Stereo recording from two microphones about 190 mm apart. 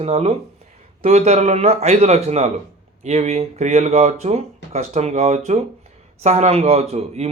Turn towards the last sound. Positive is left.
turn(degrees=-35)  # may be behind; listen again after turning